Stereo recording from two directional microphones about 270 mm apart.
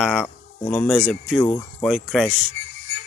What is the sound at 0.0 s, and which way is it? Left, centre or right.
Speech, centre.